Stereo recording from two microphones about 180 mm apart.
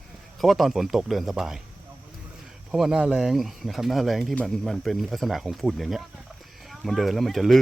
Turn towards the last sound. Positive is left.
turn(degrees=0)  # may be behind; listen again after turning